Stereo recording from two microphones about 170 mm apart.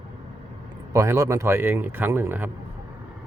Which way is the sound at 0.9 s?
20° right (ahead or behind).